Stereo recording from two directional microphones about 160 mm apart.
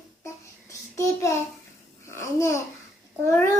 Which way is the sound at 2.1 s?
15° left (ahead or behind).